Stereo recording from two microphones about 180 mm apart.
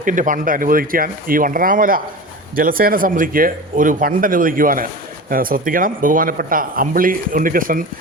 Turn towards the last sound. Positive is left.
turn(degrees=-50)  # may be behind; listen again after turning